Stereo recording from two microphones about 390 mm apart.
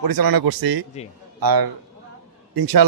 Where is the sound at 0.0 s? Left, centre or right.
Right.